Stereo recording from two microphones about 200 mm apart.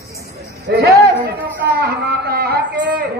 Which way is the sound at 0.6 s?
50° right (ahead or behind).